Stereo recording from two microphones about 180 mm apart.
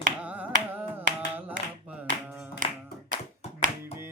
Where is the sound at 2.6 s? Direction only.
45° right (ahead or behind).